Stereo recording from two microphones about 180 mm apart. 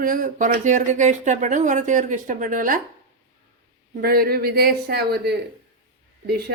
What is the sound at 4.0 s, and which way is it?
Speech, 55° right (ahead or behind).